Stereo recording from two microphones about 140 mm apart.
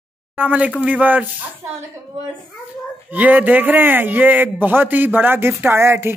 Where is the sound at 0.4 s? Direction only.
10° right (ahead or behind).